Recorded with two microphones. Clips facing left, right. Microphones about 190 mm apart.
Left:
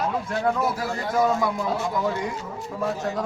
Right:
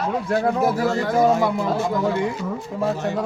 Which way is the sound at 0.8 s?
90° right.